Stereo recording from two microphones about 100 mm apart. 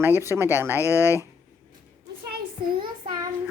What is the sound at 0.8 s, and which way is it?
Speech, 30° left (ahead or behind).